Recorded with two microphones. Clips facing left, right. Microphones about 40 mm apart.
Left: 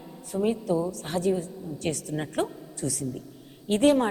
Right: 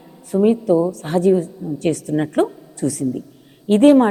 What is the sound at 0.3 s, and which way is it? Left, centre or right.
Speech, right.